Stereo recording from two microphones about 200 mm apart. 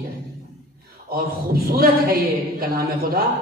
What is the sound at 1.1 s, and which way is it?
A woman's voice, 50° right (ahead or behind).